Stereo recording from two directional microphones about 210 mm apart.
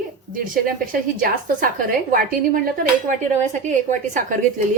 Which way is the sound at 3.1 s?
35° right (ahead or behind).